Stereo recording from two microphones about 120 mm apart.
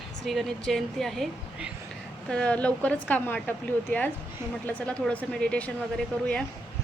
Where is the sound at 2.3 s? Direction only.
10° left (ahead or behind).